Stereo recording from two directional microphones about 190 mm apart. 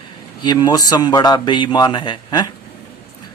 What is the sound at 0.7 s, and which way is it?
Speech, 20° left (ahead or behind).